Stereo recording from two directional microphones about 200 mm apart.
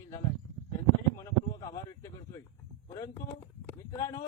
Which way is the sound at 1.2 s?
15° left (ahead or behind).